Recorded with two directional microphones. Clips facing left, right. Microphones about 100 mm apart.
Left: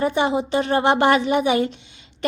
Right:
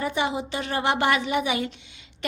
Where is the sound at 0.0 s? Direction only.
35° left (ahead or behind).